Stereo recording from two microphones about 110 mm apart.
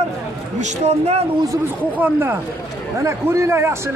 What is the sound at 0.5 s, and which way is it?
Speech, 90° right.